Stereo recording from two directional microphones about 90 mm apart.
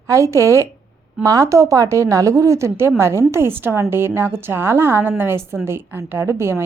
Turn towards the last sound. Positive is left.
turn(degrees=-30)  # may be behind; listen again after turning